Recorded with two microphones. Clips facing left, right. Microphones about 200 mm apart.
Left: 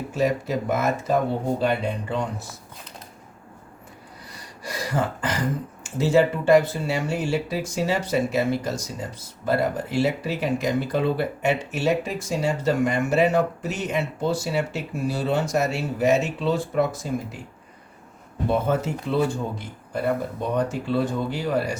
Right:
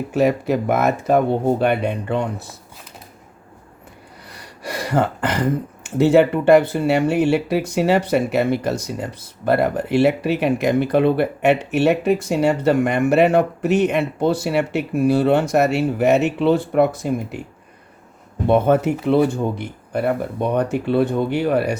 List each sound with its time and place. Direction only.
0.1 s speech: 65° right (ahead or behind)
4.3 s gasp: 65° right (ahead or behind)
5.8 s speech: 65° right (ahead or behind)
18.4 s speech: 65° right (ahead or behind)